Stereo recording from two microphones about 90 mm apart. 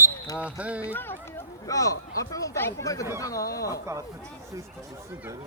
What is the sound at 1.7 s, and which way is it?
Speech, 40° left (ahead or behind).